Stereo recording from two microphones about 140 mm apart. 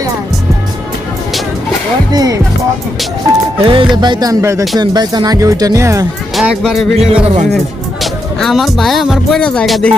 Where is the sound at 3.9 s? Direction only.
30° right (ahead or behind).